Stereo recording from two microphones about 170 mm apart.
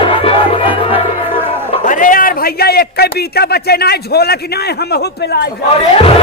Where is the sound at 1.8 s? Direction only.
50° left (ahead or behind); by 5.5 s 70° left (ahead or behind).